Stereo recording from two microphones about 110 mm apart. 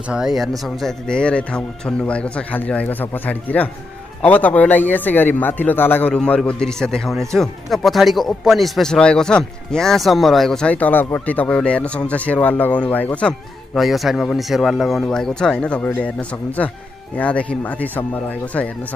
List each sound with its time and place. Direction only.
0.1 s speech: 5° right (ahead or behind); by 13.3 s 15° left (ahead or behind)
13.7 s speech: centre (ahead or behind)